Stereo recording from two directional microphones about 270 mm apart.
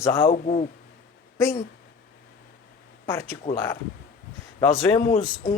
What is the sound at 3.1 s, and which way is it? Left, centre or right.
Speech, centre.